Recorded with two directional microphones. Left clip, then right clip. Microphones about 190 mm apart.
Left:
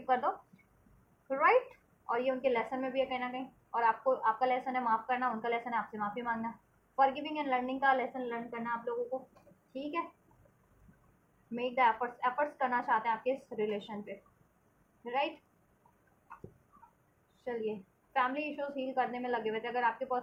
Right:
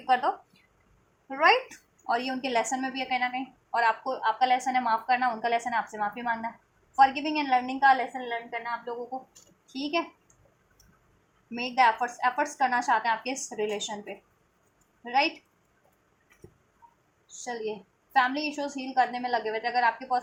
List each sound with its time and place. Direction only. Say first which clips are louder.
0.0 s a woman's voice: right 6 dB; 30° right (ahead or behind)
9.7 s a woman's voice: right 9 dB; 45° right (ahead or behind)
11.5 s a woman's voice: right 6 dB; 40° right (ahead or behind)
17.4 s a woman's voice: right 3 dB; 40° right (ahead or behind)